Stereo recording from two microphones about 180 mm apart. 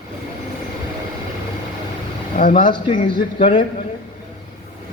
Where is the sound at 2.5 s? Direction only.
25° left (ahead or behind).